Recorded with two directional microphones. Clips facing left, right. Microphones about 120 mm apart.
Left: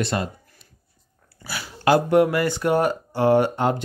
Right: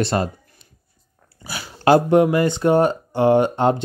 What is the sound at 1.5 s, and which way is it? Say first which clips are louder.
Speech: right 4 dB; 20° right (ahead or behind).